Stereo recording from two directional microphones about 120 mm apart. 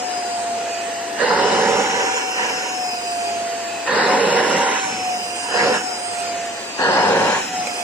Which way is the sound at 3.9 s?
10° right (ahead or behind).